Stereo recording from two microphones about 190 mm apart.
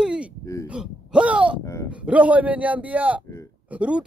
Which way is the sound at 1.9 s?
5° right (ahead or behind).